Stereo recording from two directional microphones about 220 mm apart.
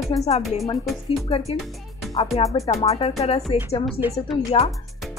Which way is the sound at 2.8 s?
25° left (ahead or behind).